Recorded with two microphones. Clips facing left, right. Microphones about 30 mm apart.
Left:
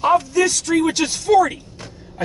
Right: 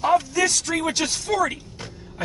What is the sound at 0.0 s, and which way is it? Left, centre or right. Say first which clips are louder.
Speech: left 3 dB; centre.